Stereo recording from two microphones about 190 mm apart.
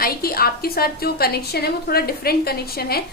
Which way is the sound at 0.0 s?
50° left (ahead or behind).